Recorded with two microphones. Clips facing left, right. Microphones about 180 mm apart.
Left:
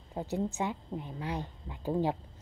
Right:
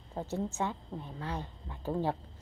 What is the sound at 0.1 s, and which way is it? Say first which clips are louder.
A woman's voice: left 2 dB; 15° left (ahead or behind).